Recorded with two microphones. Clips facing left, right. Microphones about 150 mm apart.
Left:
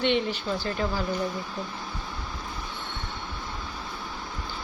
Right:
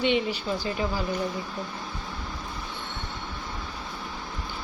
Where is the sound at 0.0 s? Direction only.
10° right (ahead or behind).